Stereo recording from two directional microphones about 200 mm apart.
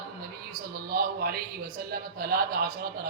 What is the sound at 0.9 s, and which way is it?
A man's voice, 50° right (ahead or behind).